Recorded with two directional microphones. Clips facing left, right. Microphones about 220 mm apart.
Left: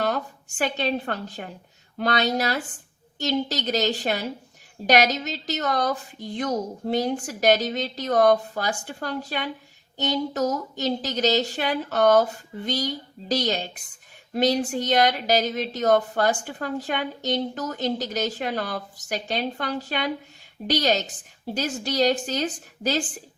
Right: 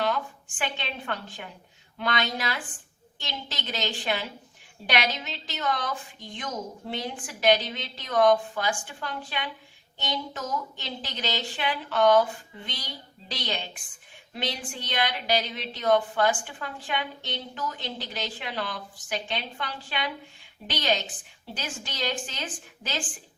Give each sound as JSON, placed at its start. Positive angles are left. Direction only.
{"t": 0.0, "sound": "a woman's voice", "side_deg": 40}